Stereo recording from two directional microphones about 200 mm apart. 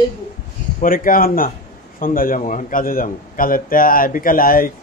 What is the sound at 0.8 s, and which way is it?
A man's voice, 45° left (ahead or behind).